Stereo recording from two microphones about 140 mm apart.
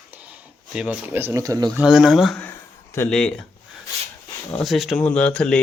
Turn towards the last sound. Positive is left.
turn(degrees=5)  # may be behind; listen again after turning